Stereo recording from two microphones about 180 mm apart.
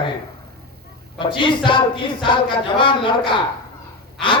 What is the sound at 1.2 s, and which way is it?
Speech, 25° left (ahead or behind).